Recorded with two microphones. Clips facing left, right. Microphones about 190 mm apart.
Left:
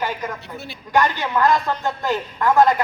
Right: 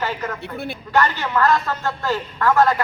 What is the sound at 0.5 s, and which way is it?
Speech, 55° right (ahead or behind).